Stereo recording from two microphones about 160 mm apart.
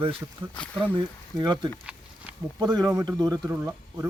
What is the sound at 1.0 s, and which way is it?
Speech, 25° right (ahead or behind).